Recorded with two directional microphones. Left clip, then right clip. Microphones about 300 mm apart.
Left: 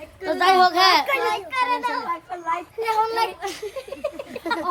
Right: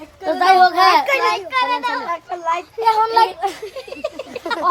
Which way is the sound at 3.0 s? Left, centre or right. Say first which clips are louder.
Right 5 dB; centre.